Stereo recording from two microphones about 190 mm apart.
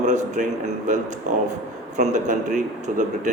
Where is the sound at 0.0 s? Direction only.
40° right (ahead or behind).